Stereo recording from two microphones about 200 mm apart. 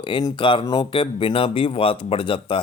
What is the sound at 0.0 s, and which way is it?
Speech, 20° left (ahead or behind).